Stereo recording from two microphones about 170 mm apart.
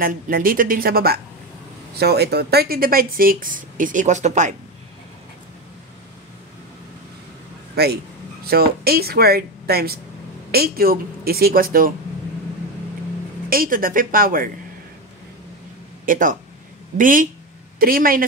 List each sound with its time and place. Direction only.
0.0 s speech: 55° right (ahead or behind)
7.7 s speech: 70° right (ahead or behind)
13.5 s speech: 55° right (ahead or behind)
16.1 s speech: 50° right (ahead or behind)